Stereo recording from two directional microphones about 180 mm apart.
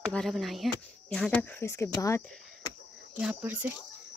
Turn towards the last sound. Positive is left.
turn(degrees=-5)  # may be behind; listen again after turning